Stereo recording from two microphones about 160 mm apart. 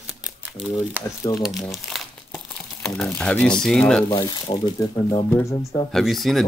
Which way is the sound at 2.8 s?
5° left (ahead or behind).